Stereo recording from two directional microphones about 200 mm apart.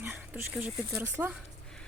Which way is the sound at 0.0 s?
10° right (ahead or behind).